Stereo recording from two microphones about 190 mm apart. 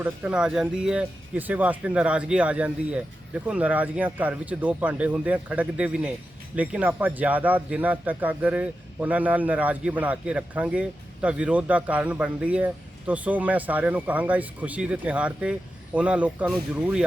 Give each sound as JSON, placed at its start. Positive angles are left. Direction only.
{"t": 0.0, "sound": "a man's voice", "side_deg": -5}